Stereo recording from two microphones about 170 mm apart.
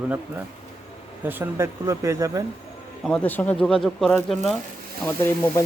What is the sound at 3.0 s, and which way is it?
Speech, 5° left (ahead or behind).